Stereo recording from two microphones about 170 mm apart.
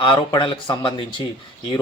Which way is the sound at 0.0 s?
30° left (ahead or behind).